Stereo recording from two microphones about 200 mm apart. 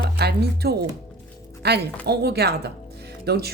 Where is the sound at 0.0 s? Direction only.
55° right (ahead or behind).